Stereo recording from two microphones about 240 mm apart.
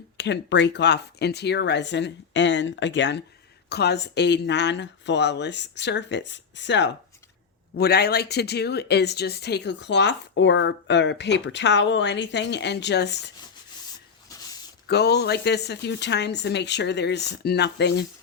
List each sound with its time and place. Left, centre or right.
0.2 s speech: left
14.8 s speech: left